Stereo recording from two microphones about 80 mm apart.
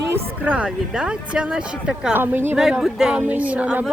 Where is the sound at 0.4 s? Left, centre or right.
Centre.